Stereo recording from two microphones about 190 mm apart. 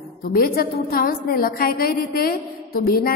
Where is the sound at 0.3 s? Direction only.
50° left (ahead or behind).